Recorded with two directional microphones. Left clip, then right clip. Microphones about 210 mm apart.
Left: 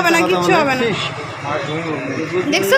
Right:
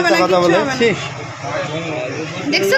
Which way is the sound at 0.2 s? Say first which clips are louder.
Right 2 dB; 30° right (ahead or behind).